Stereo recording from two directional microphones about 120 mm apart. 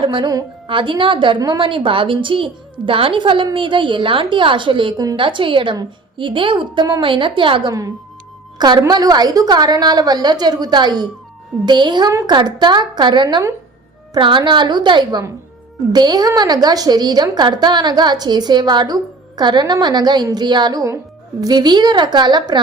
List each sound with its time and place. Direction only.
0.0 s a woman's voice: 40° right (ahead or behind)
7.7 s a woman's voice: 30° right (ahead or behind)